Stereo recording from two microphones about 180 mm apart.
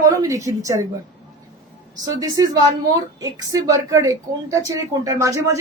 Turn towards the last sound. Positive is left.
turn(degrees=-15)  # may be behind; listen again after turning